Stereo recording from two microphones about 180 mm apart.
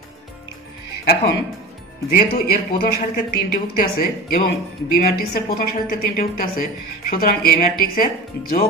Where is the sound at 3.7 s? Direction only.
55° left (ahead or behind).